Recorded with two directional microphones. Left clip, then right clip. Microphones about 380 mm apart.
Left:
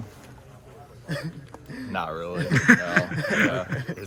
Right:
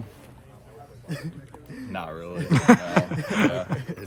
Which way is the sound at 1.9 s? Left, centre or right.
Centre.